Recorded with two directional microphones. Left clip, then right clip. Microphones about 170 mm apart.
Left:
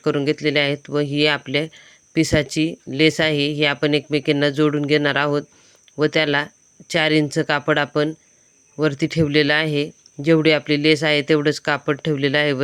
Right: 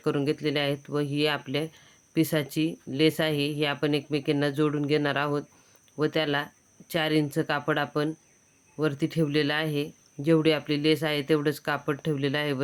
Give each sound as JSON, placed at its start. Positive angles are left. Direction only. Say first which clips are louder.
{"t": 0.0, "sound": "speech", "louder": "left 7 dB", "side_deg": 25}